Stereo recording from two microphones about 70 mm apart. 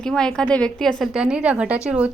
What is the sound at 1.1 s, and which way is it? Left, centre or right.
A woman's voice, centre.